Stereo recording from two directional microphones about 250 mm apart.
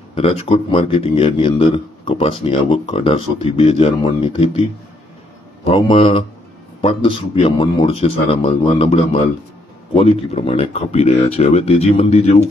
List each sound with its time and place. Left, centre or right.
0.1 s speech: left
5.6 s speech: left